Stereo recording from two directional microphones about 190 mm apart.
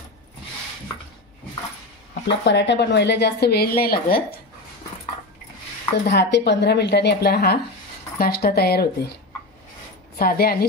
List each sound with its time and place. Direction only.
2.2 s speech: 65° left (ahead or behind)
6.0 s speech: 60° left (ahead or behind)
10.1 s a woman's voice: 50° left (ahead or behind)